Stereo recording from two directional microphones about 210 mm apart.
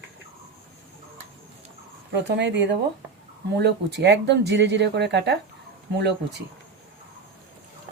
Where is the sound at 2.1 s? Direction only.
55° right (ahead or behind).